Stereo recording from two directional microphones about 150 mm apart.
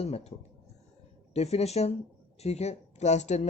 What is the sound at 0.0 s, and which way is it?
Speech, 45° left (ahead or behind).